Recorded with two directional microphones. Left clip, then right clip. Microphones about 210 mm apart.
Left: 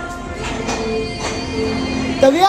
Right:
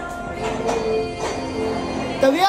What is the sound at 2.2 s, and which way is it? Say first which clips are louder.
Speech: left 5 dB; 10° right (ahead or behind).